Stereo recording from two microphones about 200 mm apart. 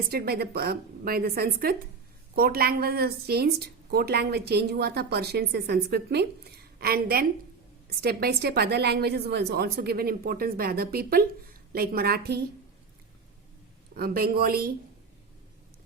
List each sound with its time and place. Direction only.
0.1 s a woman's voice: 50° right (ahead or behind)
13.9 s a woman's voice: 50° right (ahead or behind)